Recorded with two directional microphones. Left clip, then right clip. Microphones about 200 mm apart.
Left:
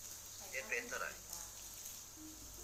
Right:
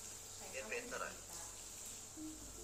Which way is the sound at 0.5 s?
10° left (ahead or behind).